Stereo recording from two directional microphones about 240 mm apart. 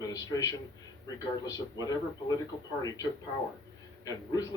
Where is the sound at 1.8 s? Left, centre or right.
Centre.